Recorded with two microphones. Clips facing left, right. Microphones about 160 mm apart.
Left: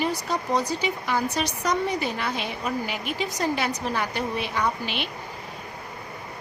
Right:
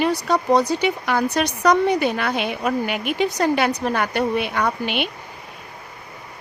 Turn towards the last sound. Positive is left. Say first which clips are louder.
# right 5 dB
turn(degrees=-65)  # may be behind; listen again after turning